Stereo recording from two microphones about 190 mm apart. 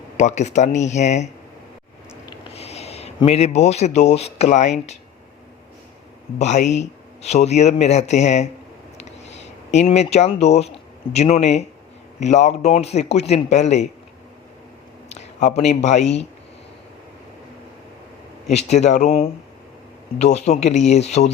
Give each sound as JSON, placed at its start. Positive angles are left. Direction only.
{"t": 0.2, "sound": "speech", "side_deg": 40}
{"t": 2.5, "sound": "speech", "side_deg": 35}
{"t": 6.4, "sound": "speech", "side_deg": 40}
{"t": 9.0, "sound": "a sound", "side_deg": 35}
{"t": 11.1, "sound": "speech", "side_deg": 35}
{"t": 15.1, "sound": "speech", "side_deg": 35}
{"t": 18.5, "sound": "speech", "side_deg": 35}